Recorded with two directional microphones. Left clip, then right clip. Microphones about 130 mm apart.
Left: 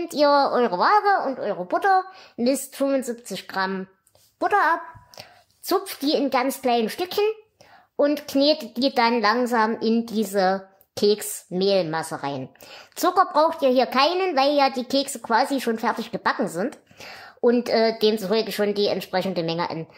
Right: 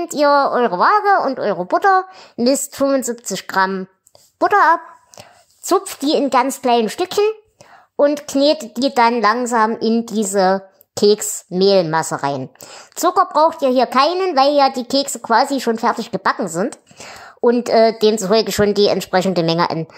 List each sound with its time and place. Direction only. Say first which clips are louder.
0.0 s a woman's voice: right 5 dB; 35° right (ahead or behind)
1.2 s a woman's voice: right 7 dB; 75° right (ahead or behind)
1.6 s a woman's voice: right 5 dB; 40° right (ahead or behind); by 19.9 s 55° right (ahead or behind)